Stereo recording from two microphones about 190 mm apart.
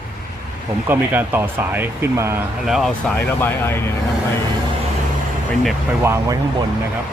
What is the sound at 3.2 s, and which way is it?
Speech, 10° left (ahead or behind).